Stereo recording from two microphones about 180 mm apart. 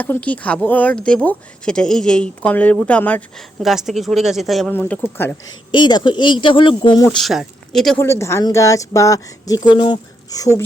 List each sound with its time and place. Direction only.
0.0 s speech: 10° left (ahead or behind)
4.7 s speech: 10° left (ahead or behind)
5.7 s speech: 25° left (ahead or behind)
7.1 s speech: centre (ahead or behind)
7.9 s speech: 15° left (ahead or behind)